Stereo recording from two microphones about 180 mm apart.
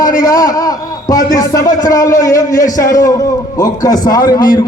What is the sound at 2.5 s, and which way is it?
Speech, 45° left (ahead or behind).